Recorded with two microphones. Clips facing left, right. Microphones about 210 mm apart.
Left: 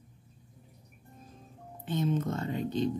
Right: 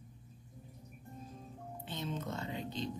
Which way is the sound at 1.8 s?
50° left (ahead or behind).